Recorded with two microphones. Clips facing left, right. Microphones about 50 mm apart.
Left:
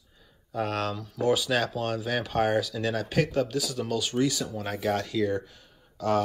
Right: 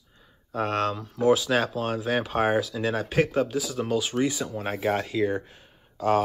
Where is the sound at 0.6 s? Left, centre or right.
Centre.